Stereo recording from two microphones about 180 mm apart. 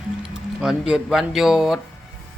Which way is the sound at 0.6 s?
5° right (ahead or behind).